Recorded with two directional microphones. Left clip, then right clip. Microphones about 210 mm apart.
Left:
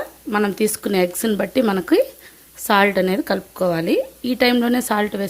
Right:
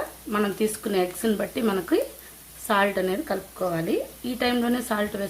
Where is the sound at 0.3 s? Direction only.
40° left (ahead or behind).